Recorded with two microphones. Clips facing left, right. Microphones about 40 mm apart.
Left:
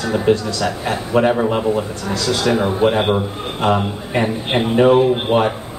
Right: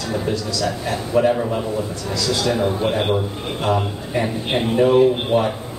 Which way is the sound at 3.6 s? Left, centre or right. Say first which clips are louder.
Left 4 dB; left.